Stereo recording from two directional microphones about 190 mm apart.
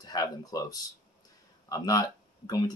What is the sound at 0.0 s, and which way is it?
Speech, 20° left (ahead or behind).